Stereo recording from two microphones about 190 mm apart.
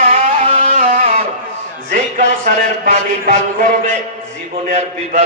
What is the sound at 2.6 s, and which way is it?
A man's voice, 40° right (ahead or behind).